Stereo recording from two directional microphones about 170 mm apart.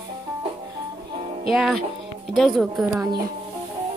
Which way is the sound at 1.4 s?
Centre (ahead or behind).